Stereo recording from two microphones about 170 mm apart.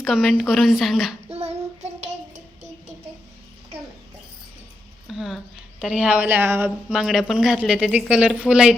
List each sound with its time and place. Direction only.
0.0 s speech: centre (ahead or behind)
1.3 s child singing: 40° right (ahead or behind)
5.0 s a sound: centre (ahead or behind)
5.8 s speech: 5° right (ahead or behind)
6.7 s speech: 5° right (ahead or behind)